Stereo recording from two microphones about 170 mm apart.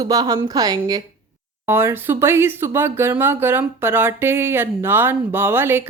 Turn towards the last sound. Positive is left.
turn(degrees=-10)  # may be behind; listen again after turning